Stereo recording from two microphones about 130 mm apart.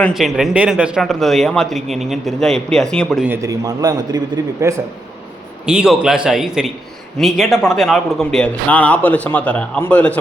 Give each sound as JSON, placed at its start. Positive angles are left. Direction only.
{"t": 0.1, "sound": "speech", "side_deg": 0}
{"t": 3.2, "sound": "a man's voice", "side_deg": -20}
{"t": 5.6, "sound": "a man's voice", "side_deg": -5}